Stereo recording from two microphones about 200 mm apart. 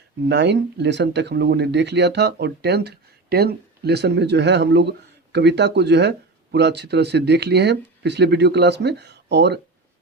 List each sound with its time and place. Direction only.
0.3 s speech: 60° right (ahead or behind)